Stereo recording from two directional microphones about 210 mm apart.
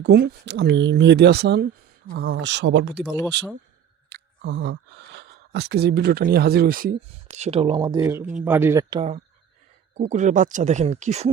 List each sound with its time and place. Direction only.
0.0 s speech: 50° right (ahead or behind)
4.1 s speech: 55° right (ahead or behind); by 11.3 s 30° right (ahead or behind)